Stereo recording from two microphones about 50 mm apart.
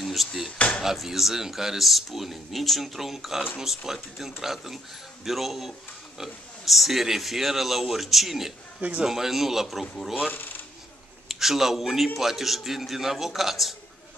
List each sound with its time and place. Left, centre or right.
0.0 s speech: centre
0.6 s speech: left
0.8 s speech: centre
10.3 s speech: left
11.2 s a man's voice: centre